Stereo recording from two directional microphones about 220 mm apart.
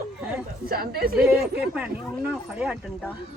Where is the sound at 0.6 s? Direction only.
45° right (ahead or behind).